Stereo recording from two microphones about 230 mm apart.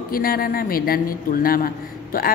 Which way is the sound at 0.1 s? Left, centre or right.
Left.